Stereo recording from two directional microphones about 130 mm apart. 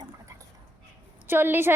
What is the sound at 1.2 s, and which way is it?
Speech, 15° right (ahead or behind).